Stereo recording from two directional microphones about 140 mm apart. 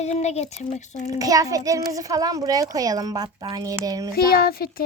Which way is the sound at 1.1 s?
25° right (ahead or behind).